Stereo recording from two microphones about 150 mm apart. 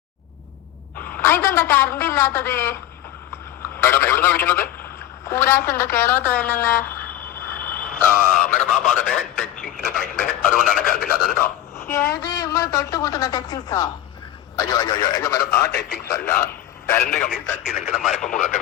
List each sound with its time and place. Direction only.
0.9 s a woman's voice: 15° left (ahead or behind)
3.8 s a man's voice: 15° left (ahead or behind)
11.9 s a sound: 15° left (ahead or behind)
12.2 s speech: 25° left (ahead or behind)
15.4 s a man's voice: 90° left
16.2 s a sound: 15° left (ahead or behind)
17.1 s speech: 5° left (ahead or behind)